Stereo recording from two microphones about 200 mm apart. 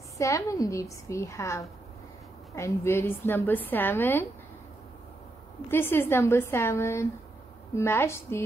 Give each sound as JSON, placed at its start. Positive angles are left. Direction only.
{"t": 0.2, "sound": "a woman's voice", "side_deg": 15}
{"t": 5.7, "sound": "a woman's voice", "side_deg": 10}